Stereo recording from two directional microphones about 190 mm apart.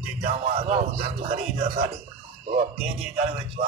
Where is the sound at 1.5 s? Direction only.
50° right (ahead or behind).